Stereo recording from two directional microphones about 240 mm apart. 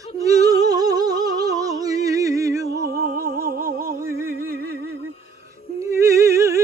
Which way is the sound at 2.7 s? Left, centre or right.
Right.